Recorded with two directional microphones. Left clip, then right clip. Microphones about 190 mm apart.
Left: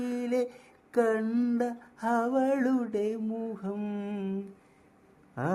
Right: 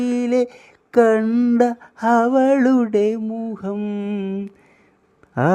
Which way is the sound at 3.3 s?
25° right (ahead or behind).